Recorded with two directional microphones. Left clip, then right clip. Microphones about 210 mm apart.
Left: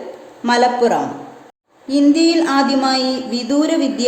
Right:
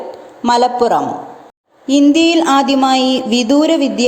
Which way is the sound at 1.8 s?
30° right (ahead or behind).